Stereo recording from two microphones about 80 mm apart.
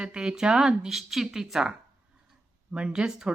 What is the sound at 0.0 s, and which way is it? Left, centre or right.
A woman's voice, centre.